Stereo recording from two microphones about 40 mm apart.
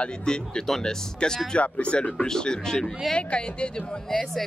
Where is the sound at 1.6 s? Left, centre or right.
Left.